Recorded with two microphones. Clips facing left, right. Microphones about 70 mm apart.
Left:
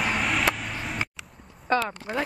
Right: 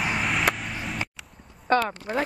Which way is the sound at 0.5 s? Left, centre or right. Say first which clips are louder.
Even; centre.